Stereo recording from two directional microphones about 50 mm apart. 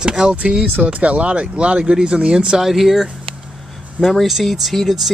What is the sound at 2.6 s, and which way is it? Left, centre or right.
Speech, centre.